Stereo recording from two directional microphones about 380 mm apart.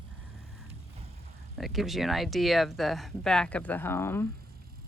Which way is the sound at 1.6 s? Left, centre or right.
Centre.